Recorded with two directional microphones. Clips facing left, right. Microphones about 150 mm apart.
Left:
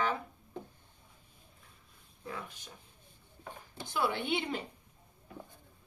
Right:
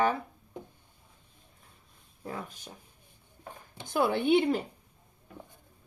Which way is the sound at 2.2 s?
35° right (ahead or behind).